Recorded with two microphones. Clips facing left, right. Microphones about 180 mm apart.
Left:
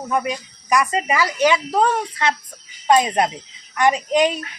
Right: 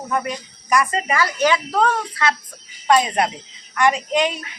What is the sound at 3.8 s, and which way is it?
Speech, 20° left (ahead or behind).